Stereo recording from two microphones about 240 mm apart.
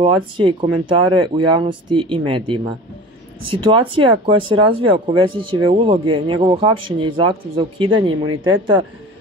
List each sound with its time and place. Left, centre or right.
0.0 s speech: right